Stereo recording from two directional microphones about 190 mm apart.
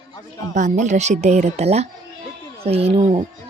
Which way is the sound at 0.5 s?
40° right (ahead or behind).